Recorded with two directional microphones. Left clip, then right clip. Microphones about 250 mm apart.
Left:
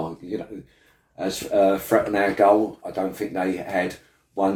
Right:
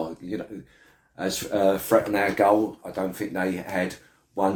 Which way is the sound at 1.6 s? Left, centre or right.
Centre.